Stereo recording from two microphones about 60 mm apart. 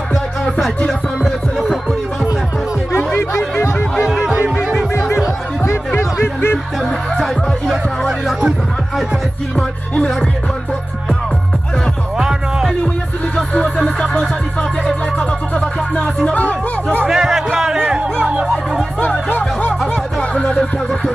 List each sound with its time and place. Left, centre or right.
0.1 s music: centre
3.2 s music: left
5.9 s music: left
6.8 s speech: centre
9.6 s speech: centre
12.2 s music: centre
13.7 s music: centre
17.1 s music: centre
17.7 s music: centre
19.2 s music: left